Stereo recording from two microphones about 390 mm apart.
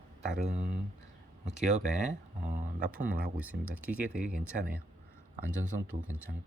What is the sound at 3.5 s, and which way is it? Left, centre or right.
Speech, right.